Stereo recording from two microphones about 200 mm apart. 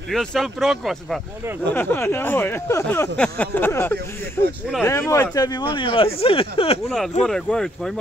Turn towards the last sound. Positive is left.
turn(degrees=5)  # may be behind; listen again after turning